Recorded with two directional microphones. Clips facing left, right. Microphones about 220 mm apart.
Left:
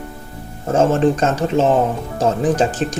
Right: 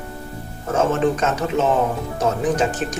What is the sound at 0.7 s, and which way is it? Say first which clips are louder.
Speech: left 4 dB; 30° left (ahead or behind).